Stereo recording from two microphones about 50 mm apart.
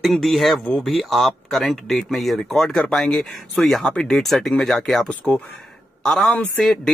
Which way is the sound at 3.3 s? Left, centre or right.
Centre.